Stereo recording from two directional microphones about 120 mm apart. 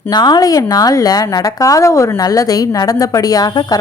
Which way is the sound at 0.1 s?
35° left (ahead or behind).